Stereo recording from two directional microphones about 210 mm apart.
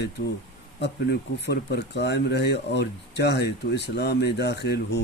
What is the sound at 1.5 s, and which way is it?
Speech, 55° left (ahead or behind).